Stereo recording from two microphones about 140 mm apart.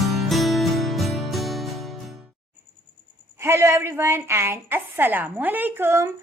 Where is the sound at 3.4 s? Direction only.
20° right (ahead or behind).